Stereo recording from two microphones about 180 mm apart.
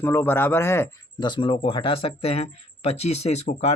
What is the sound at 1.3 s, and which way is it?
Speech, 30° left (ahead or behind).